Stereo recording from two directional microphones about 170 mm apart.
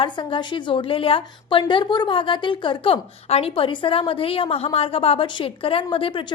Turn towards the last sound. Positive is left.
turn(degrees=30)  # may be behind; listen again after turning